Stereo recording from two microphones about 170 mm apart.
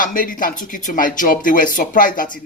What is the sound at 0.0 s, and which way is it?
Speech, 55° left (ahead or behind).